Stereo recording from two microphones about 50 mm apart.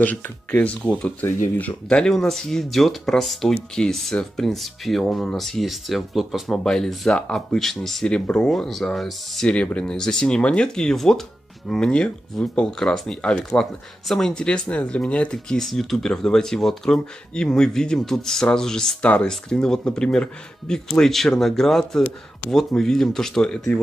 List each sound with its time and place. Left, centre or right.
0.0 s speech: left
1.2 s speech: left
1.6 s speech: left
2.1 s speech: centre
6.5 s speech: centre
7.1 s speech: centre
8.1 s speech: centre
8.5 s speech: centre
9.5 s speech: left; by 14.4 s centre
14.4 s speech: centre
15.3 s speech: centre
18.9 s speech: left
19.5 s speech: centre